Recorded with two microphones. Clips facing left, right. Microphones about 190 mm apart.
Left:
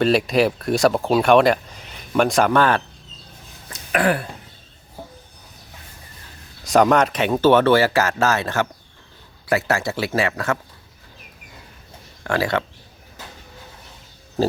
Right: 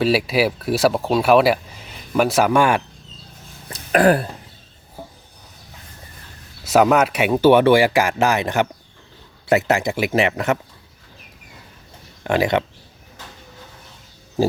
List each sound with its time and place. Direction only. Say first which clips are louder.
0.0 s speech: left 1 dB; 5° right (ahead or behind)
3.7 s a sound: right 5 dB; 40° right (ahead or behind)
6.7 s speech: right 1 dB; 5° right (ahead or behind)
12.2 s speech: right 3 dB; 20° right (ahead or behind)